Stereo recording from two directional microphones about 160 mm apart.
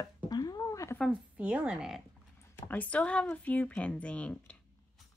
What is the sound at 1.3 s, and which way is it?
Speech, 10° right (ahead or behind).